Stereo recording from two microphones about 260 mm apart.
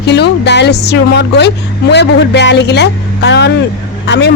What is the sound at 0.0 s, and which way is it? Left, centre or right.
A man's voice, left.